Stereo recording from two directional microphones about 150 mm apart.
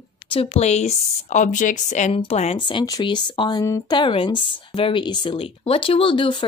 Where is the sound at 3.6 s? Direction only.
20° left (ahead or behind).